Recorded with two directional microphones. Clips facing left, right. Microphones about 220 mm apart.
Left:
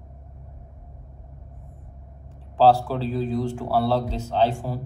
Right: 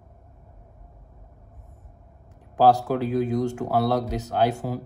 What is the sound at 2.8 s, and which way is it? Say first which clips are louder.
Speech: right 3 dB; 15° right (ahead or behind).